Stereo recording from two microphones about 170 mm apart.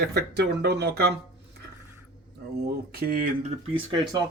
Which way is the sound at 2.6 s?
65° right (ahead or behind).